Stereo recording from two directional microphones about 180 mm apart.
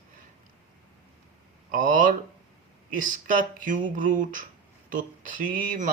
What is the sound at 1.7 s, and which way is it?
Speech, 50° right (ahead or behind).